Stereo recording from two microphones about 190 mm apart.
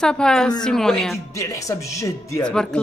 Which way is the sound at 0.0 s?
5° left (ahead or behind).